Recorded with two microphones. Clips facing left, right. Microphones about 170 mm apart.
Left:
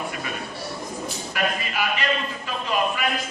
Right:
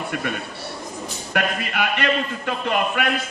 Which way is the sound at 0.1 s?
60° right (ahead or behind).